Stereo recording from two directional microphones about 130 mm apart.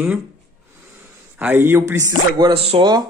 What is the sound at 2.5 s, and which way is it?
Speech, 50° right (ahead or behind).